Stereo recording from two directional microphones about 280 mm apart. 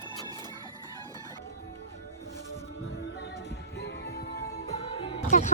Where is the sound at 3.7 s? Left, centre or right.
Left.